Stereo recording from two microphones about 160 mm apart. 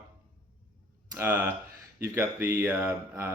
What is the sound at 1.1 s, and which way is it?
Speech, 15° right (ahead or behind).